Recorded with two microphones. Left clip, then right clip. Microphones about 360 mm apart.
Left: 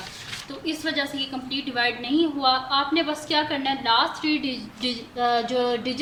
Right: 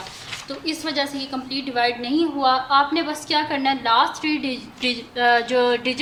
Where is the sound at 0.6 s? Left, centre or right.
Centre.